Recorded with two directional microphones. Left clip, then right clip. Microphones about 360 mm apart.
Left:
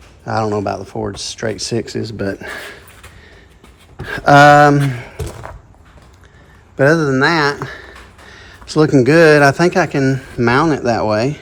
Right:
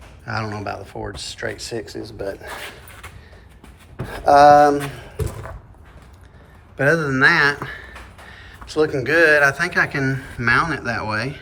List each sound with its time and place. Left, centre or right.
0.3 s speech: centre
4.3 s speech: centre
6.7 s speech: centre